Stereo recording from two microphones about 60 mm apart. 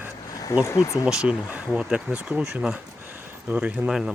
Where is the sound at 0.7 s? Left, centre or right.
Left.